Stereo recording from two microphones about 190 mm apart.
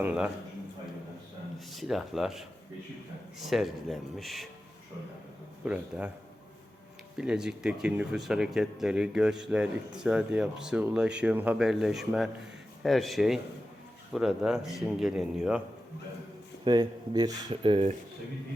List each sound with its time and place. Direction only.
0.0 s a man's voice: 5° right (ahead or behind)
1.5 s speech: centre (ahead or behind)
3.4 s speech: centre (ahead or behind)
5.6 s a man's voice: 5° right (ahead or behind)
7.2 s speech: 5° right (ahead or behind)
16.6 s speech: 20° right (ahead or behind)